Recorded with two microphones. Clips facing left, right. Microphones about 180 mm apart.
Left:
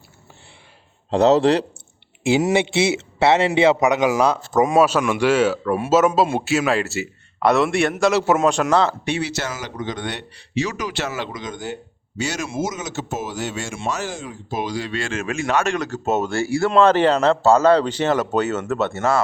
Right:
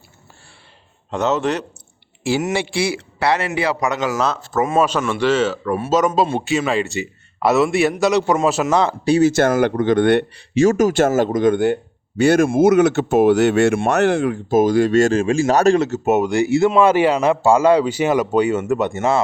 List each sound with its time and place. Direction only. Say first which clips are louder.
1.1 s a man's voice: left 5 dB; 35° left (ahead or behind)
2.5 s a man's voice: left 2 dB; 20° left (ahead or behind); by 8.8 s 5° right (ahead or behind)
9.0 s speech: right 11 dB; 40° right (ahead or behind); by 14.6 s 60° right (ahead or behind)
14.6 s speech: right 12 dB; 50° right (ahead or behind)
15.2 s a man's voice: right 7 dB; 30° right (ahead or behind)